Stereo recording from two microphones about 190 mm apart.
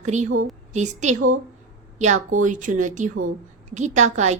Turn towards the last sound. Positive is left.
turn(degrees=-40)  # may be behind; listen again after turning